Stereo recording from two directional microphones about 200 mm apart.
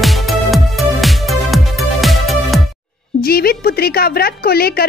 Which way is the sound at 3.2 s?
50° left (ahead or behind).